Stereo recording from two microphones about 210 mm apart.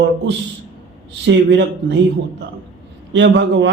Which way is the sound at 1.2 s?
55° right (ahead or behind).